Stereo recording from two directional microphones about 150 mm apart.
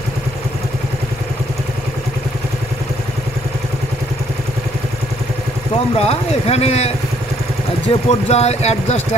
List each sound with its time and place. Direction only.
5.9 s speech: 40° left (ahead or behind)
8.1 s speech: 45° left (ahead or behind)